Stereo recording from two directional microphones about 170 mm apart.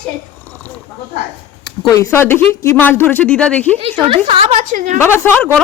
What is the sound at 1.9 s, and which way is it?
Speech, 15° left (ahead or behind).